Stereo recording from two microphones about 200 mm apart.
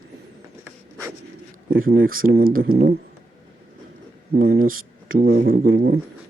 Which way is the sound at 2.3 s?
45° right (ahead or behind).